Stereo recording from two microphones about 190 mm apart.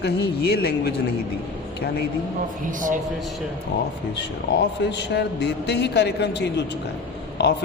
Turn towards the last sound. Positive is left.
turn(degrees=60)  # may be behind; listen again after turning